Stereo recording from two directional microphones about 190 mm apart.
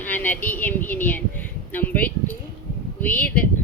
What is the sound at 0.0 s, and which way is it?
A woman's voice, 10° left (ahead or behind).